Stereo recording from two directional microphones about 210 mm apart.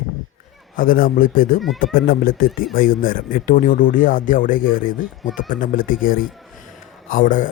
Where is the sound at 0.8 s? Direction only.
40° left (ahead or behind).